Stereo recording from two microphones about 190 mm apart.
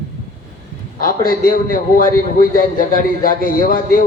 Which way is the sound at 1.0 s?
45° left (ahead or behind).